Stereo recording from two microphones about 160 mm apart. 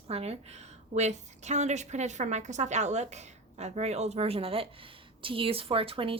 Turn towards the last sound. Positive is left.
turn(degrees=-35)  # may be behind; listen again after turning